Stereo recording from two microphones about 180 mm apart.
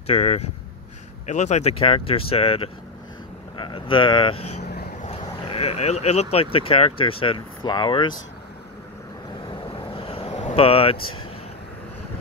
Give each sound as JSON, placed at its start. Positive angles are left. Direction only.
{"t": 0.0, "sound": "speech", "side_deg": 35}
{"t": 5.0, "sound": "a sound", "side_deg": 35}
{"t": 6.3, "sound": "speech", "side_deg": 30}
{"t": 9.9, "sound": "vehicle", "side_deg": 30}